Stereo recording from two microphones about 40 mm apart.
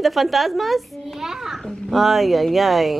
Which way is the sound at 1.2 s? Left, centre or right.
Centre.